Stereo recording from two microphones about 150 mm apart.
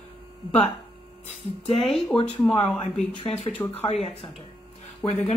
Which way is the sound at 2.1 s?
5° left (ahead or behind).